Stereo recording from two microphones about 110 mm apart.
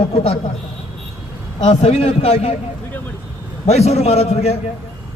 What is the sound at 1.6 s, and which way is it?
Speech, 70° left (ahead or behind).